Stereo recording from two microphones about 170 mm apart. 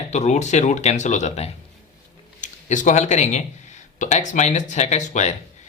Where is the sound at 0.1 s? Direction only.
40° left (ahead or behind).